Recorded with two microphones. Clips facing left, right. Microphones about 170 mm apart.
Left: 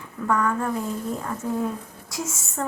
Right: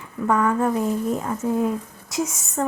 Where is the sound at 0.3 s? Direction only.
20° right (ahead or behind).